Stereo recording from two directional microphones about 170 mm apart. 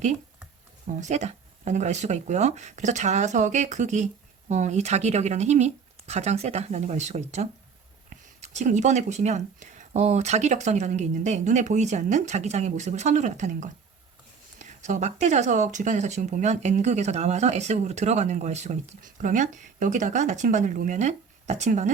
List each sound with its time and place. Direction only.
0.9 s speech: 45° right (ahead or behind)